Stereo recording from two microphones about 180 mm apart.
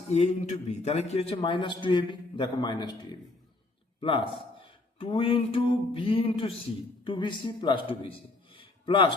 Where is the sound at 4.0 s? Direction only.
30° left (ahead or behind).